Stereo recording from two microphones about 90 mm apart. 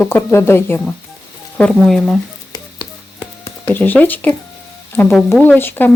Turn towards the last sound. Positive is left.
turn(degrees=25)  # may be behind; listen again after turning